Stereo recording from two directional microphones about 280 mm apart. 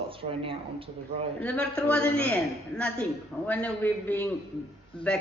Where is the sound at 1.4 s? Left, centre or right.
Centre.